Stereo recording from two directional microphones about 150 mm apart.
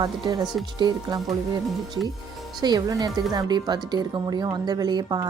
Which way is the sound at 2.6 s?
25° right (ahead or behind).